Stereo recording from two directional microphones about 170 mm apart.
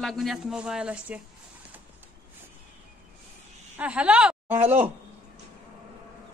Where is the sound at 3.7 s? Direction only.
5° right (ahead or behind).